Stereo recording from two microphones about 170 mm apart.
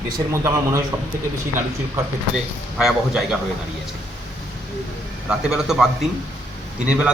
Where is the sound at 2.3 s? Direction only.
5° right (ahead or behind).